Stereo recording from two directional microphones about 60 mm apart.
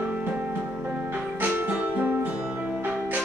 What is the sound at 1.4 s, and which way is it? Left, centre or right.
Music, right.